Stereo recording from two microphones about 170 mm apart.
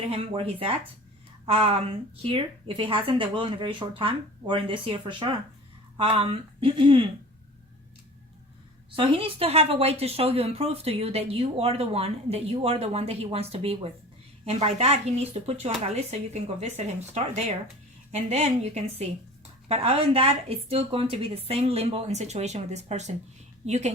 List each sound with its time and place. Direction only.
0.1 s a woman's voice: 30° right (ahead or behind)
9.0 s a woman's voice: 30° right (ahead or behind)